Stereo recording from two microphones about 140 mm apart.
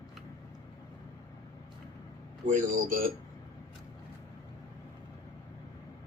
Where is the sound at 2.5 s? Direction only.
70° right (ahead or behind).